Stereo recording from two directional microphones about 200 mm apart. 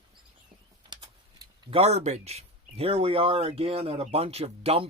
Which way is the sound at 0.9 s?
20° right (ahead or behind).